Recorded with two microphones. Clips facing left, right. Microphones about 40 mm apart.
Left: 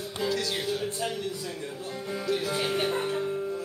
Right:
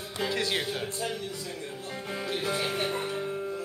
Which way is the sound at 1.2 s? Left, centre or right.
Left.